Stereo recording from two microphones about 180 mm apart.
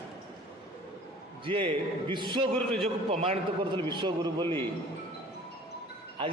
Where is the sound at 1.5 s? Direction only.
30° right (ahead or behind).